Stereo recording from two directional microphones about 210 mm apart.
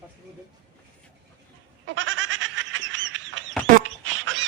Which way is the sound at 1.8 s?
65° right (ahead or behind).